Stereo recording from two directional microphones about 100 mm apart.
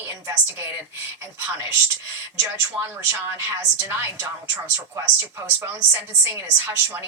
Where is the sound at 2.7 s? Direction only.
10° right (ahead or behind).